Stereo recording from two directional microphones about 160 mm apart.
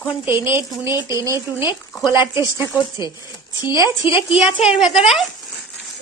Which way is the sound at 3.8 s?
30° left (ahead or behind).